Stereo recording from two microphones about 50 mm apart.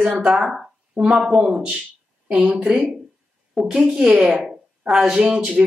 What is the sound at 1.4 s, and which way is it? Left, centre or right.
Speech, right.